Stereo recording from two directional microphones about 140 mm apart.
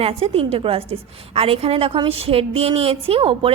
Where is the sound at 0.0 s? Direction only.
45° right (ahead or behind).